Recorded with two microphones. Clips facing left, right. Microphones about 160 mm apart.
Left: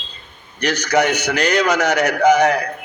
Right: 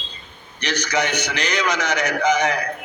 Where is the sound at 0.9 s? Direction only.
50° left (ahead or behind).